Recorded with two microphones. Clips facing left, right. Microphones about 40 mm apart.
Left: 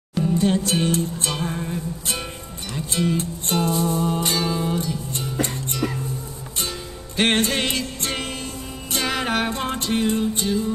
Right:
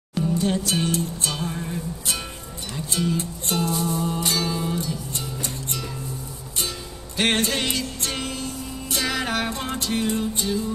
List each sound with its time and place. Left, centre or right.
0.4 s music: left
2.9 s music: left
4.5 s music: centre
4.7 s music: left
7.2 s music: left